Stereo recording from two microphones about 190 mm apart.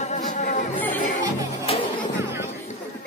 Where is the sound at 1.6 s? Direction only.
40° left (ahead or behind).